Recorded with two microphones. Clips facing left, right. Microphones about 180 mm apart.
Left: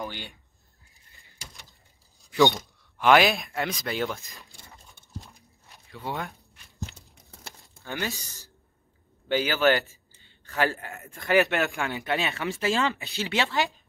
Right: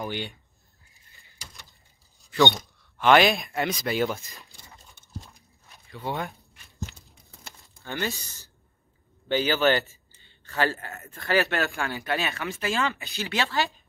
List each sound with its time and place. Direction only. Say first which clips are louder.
0.0 s speech: right 4 dB; 20° right (ahead or behind)
1.1 s door: left 1 dB; centre (ahead or behind)
2.3 s speech: left 1 dB; centre (ahead or behind)
5.9 s speech: right 2 dB; centre (ahead or behind)
7.6 s a sound: right 1 dB; centre (ahead or behind)
7.9 s speech: right 1 dB; 10° left (ahead or behind)
9.3 s speech: even; 10° left (ahead or behind)